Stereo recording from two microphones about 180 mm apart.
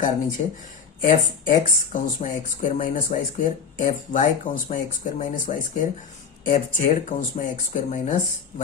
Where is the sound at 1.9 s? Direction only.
45° left (ahead or behind).